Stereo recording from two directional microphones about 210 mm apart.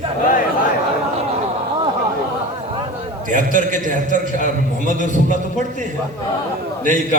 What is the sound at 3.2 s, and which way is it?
Speech, 40° right (ahead or behind).